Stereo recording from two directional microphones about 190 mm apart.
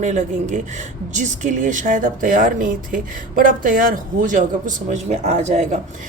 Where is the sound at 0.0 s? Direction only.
40° right (ahead or behind).